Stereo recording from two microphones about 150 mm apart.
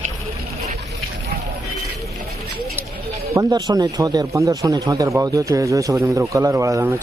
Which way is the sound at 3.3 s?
25° right (ahead or behind).